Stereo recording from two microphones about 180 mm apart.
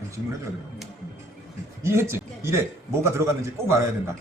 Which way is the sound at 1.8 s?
15° right (ahead or behind).